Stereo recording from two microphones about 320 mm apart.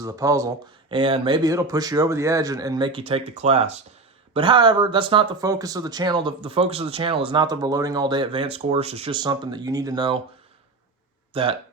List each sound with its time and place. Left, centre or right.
0.0 s speech: centre
11.3 s speech: centre